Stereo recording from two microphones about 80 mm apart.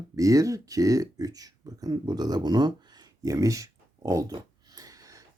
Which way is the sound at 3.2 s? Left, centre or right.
Right.